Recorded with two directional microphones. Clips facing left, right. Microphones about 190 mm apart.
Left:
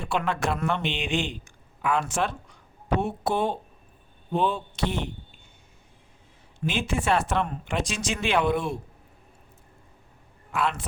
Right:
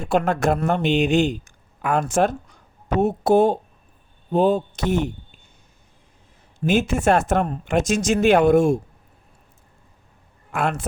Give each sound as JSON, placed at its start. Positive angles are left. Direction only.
{"t": 0.0, "sound": "a man's voice", "side_deg": -45}
{"t": 6.7, "sound": "a man's voice", "side_deg": -45}
{"t": 10.5, "sound": "a man's voice", "side_deg": -50}